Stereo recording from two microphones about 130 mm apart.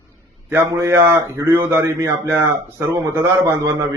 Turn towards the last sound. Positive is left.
turn(degrees=-20)  # may be behind; listen again after turning